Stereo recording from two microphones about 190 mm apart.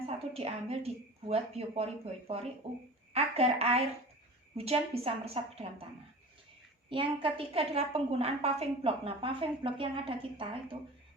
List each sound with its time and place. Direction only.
0.3 s a woman's voice: 30° right (ahead or behind)
6.9 s a woman's voice: 30° right (ahead or behind)